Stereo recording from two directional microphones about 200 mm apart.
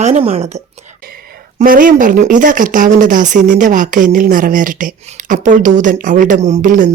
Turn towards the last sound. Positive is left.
turn(degrees=-40)  # may be behind; listen again after turning